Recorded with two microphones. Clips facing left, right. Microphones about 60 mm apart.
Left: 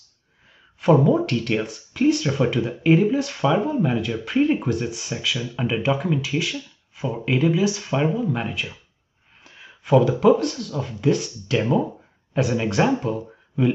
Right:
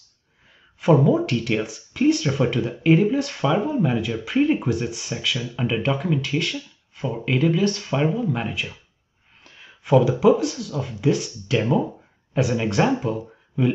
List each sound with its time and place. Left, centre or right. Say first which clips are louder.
0.7 s speech: even; centre
9.4 s a sound: left 1 dB; centre
10.2 s speech: even; centre